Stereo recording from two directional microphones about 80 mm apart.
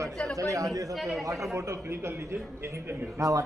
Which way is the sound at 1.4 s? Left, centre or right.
Right.